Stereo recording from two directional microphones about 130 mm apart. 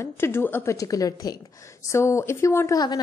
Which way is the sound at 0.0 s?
20° left (ahead or behind).